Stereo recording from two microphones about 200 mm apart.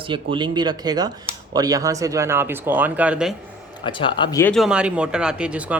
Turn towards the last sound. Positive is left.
turn(degrees=-5)  # may be behind; listen again after turning